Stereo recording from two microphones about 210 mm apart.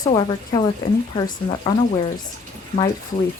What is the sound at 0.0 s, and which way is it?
Speech, 20° left (ahead or behind).